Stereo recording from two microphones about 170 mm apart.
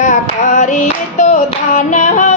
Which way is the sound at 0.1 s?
45° left (ahead or behind).